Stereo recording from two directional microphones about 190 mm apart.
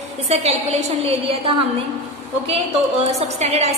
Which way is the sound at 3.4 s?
35° right (ahead or behind).